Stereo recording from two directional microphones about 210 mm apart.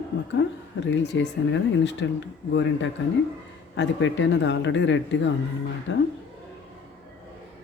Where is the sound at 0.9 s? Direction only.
60° left (ahead or behind).